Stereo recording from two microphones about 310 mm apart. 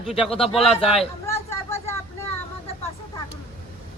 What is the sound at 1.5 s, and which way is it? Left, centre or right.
Vehicle, centre.